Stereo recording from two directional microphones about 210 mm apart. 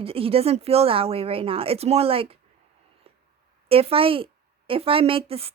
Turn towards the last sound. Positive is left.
turn(degrees=-30)  # may be behind; listen again after turning